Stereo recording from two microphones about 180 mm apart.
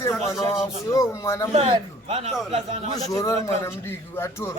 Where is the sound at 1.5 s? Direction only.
35° right (ahead or behind).